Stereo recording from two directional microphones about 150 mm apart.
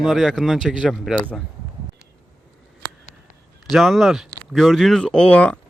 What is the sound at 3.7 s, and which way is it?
Speech, centre (ahead or behind).